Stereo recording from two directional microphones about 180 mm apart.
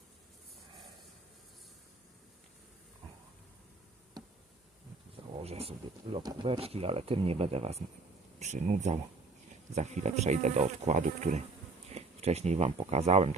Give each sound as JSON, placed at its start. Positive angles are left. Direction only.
{"t": 5.4, "sound": "speech", "side_deg": -35}